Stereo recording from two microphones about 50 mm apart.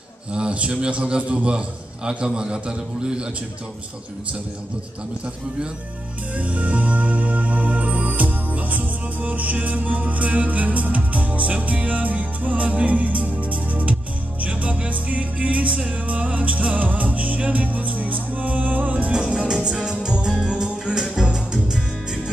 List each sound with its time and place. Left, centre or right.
0.3 s music: right
2.0 s a man's voice: centre
6.3 s music: right
19.1 s music: centre